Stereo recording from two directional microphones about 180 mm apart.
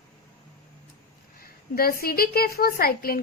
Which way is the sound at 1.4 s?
55° left (ahead or behind).